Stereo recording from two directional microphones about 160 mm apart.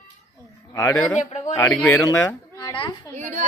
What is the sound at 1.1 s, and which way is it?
Speech, 45° left (ahead or behind).